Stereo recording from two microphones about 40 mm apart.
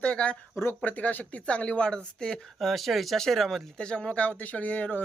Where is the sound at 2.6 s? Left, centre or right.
Centre.